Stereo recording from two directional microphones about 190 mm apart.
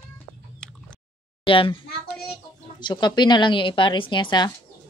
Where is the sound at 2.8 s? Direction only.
25° left (ahead or behind).